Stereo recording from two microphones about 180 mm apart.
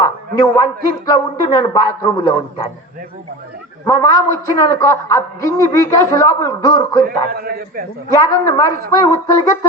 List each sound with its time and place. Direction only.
0.3 s a man's voice: 25° left (ahead or behind)
3.8 s a man's voice: 20° left (ahead or behind)
7.3 s a man's voice: 55° right (ahead or behind)
8.1 s a man's voice: 20° left (ahead or behind)